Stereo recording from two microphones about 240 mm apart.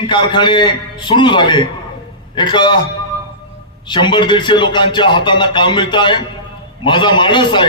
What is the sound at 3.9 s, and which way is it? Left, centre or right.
A man's voice, centre.